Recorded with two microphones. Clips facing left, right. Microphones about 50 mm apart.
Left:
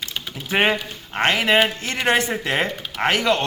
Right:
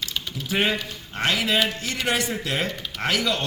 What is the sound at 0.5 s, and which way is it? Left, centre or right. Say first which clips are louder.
A man's voice: left 4 dB; left.